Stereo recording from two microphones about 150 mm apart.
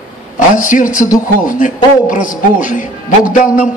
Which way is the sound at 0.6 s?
60° left (ahead or behind).